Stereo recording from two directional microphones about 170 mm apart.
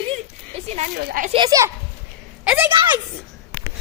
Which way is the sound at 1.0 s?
65° right (ahead or behind).